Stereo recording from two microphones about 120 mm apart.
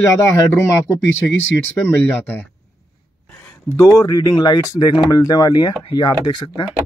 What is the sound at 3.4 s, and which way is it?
Speech, 25° left (ahead or behind).